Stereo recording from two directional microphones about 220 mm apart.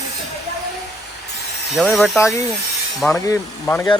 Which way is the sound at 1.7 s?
Centre (ahead or behind).